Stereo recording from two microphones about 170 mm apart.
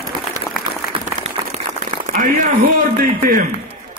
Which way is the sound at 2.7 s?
50° right (ahead or behind).